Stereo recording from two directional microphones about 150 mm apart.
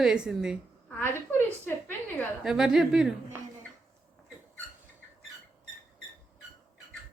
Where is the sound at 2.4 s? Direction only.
5° right (ahead or behind).